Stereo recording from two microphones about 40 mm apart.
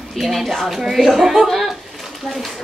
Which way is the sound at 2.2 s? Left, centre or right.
Centre.